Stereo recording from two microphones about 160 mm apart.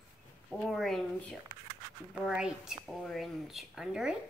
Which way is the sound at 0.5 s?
Centre (ahead or behind).